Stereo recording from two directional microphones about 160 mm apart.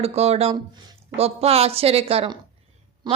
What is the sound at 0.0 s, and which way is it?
A woman's voice, 40° right (ahead or behind).